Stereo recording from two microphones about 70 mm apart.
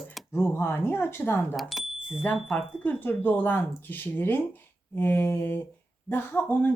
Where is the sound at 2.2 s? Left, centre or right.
Left.